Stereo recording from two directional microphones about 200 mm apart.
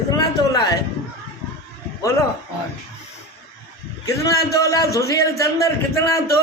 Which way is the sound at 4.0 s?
15° left (ahead or behind).